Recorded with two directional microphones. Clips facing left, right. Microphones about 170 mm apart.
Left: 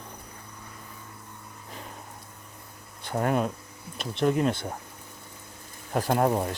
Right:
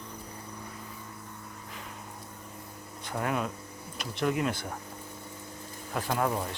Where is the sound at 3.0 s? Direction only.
40° left (ahead or behind).